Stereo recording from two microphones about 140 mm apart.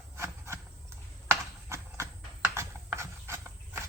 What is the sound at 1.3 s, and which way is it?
Horse, 20° right (ahead or behind).